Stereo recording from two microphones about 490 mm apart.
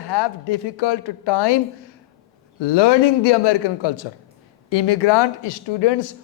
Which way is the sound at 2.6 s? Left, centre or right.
Left.